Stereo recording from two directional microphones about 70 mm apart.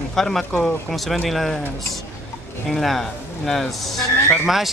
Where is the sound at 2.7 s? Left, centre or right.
Centre.